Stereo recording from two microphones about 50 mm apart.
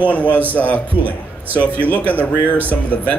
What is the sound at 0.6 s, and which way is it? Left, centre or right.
Speech, left.